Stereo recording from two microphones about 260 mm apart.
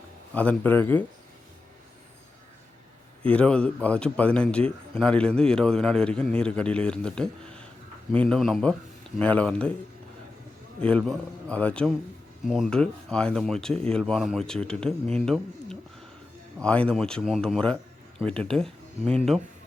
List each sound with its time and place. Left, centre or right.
0.3 s speech: centre
3.2 s speech: centre
10.8 s speech: centre
19.0 s speech: right